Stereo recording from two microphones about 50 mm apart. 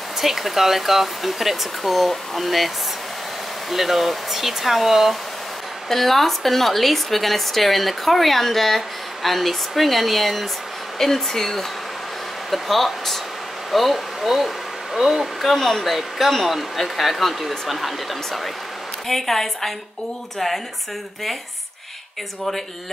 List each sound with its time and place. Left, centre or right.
0.2 s a woman's voice: centre
3.7 s a woman's voice: centre
15.5 s a woman's voice: centre